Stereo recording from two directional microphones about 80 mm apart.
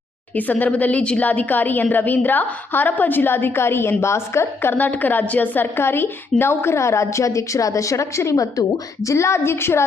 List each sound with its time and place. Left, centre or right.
0.3 s a woman's voice: left
4.7 s a woman's voice: left